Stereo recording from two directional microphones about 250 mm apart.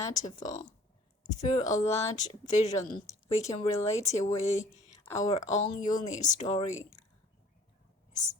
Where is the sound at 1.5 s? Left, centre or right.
Left.